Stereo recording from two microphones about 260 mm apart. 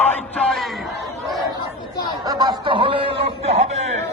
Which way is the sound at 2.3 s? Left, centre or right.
Centre.